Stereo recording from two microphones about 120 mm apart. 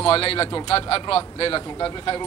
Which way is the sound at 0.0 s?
50° left (ahead or behind).